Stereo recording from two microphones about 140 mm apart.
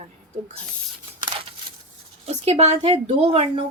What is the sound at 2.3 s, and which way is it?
A woman's voice, 50° right (ahead or behind).